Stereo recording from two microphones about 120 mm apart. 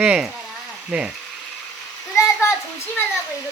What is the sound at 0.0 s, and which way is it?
Speech, 10° right (ahead or behind).